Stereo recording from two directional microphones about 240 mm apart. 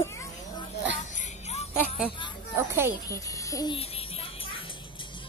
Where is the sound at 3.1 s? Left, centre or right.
Centre.